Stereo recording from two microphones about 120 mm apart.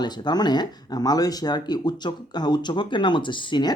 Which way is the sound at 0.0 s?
35° left (ahead or behind).